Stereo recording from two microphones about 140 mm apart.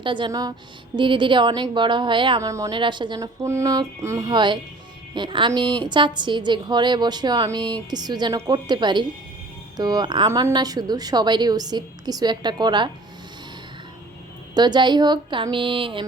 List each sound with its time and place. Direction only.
0.0 s a woman's voice: 35° right (ahead or behind)
2.4 s a woman's voice: 25° right (ahead or behind)
2.7 s a woman's voice: 35° right (ahead or behind)
3.4 s a woman's voice: 20° right (ahead or behind)
4.3 s a woman's voice: 35° right (ahead or behind)
14.5 s a woman's voice: 30° right (ahead or behind)